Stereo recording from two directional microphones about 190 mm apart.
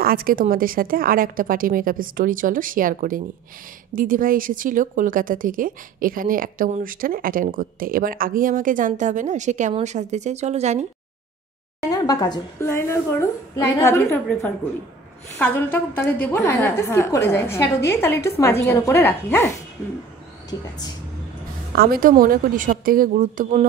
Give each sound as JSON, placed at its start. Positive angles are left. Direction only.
{"t": 0.0, "sound": "speech", "side_deg": -50}
{"t": 11.9, "sound": "a woman's voice", "side_deg": 20}
{"t": 21.7, "sound": "speech", "side_deg": -50}